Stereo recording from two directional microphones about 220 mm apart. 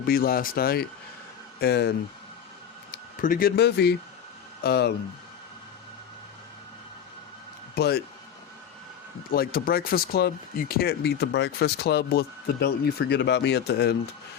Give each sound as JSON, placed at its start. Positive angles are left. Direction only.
{"t": 0.0, "sound": "speech", "side_deg": 45}
{"t": 2.9, "sound": "speech", "side_deg": 40}
{"t": 7.8, "sound": "speech", "side_deg": 45}
{"t": 9.3, "sound": "speech", "side_deg": 45}